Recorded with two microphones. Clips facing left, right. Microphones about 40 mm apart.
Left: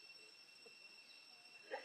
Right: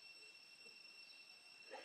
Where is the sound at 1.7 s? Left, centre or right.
Left.